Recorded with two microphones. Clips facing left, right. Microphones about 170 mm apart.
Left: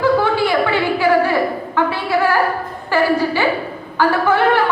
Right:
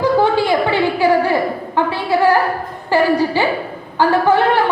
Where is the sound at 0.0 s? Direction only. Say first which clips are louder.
Right 1 dB; 20° right (ahead or behind).